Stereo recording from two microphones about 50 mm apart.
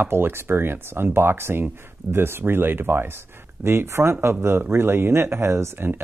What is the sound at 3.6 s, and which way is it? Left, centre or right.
Speech, right.